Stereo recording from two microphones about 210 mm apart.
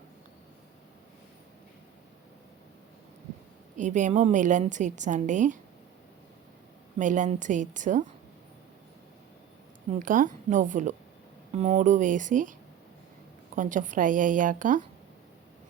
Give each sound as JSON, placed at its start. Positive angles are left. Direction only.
{"t": 3.8, "sound": "a woman's voice", "side_deg": -35}
{"t": 7.0, "sound": "a woman's voice", "side_deg": -35}
{"t": 9.9, "sound": "a woman's voice", "side_deg": -40}
{"t": 13.6, "sound": "a woman's voice", "side_deg": -40}